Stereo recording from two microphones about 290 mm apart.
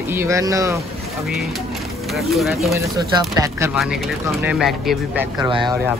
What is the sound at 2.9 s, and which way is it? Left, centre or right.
Speech, centre.